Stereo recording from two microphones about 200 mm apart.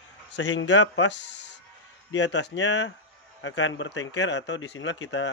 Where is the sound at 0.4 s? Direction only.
65° left (ahead or behind).